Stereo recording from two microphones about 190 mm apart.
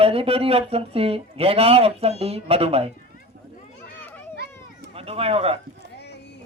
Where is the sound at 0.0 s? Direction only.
30° right (ahead or behind).